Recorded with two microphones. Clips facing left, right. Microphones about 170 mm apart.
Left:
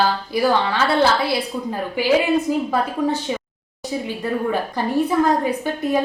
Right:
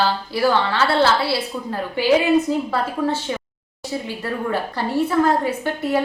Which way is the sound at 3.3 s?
15° left (ahead or behind).